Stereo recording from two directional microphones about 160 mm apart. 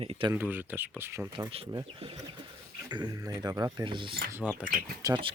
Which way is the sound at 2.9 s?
25° right (ahead or behind).